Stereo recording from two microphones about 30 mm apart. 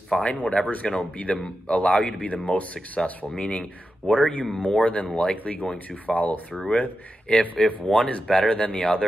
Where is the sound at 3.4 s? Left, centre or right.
Left.